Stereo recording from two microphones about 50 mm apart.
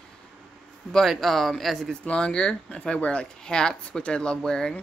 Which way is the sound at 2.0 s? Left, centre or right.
Left.